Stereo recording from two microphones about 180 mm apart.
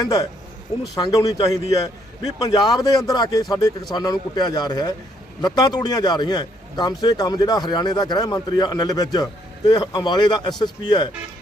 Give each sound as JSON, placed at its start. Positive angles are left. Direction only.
{"t": 0.0, "sound": "a man's voice", "side_deg": 20}